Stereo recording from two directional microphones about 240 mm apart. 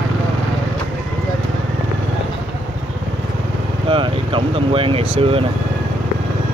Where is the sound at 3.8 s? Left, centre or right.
Right.